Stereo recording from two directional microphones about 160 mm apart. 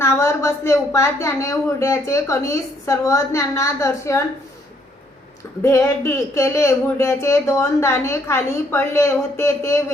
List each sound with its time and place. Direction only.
0.0 s speech: 20° left (ahead or behind)
5.6 s speech: 20° left (ahead or behind)